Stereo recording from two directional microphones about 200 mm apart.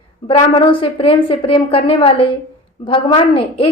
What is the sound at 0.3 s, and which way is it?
A woman's voice, 25° left (ahead or behind).